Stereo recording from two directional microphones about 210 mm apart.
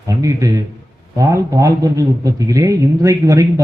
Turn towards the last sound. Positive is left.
turn(degrees=-15)  # may be behind; listen again after turning